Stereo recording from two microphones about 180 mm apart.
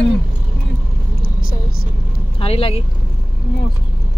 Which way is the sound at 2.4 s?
30° left (ahead or behind).